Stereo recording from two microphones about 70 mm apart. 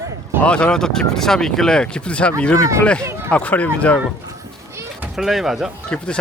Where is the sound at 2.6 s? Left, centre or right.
Right.